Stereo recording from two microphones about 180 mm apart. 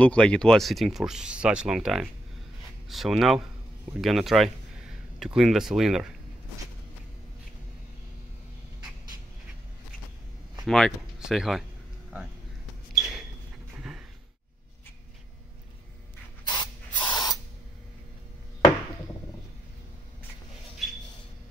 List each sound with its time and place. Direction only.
0.0 s speech: 5° left (ahead or behind)
10.6 s speech: centre (ahead or behind)
12.9 s a sound: centre (ahead or behind)
16.4 s spray: 25° left (ahead or behind)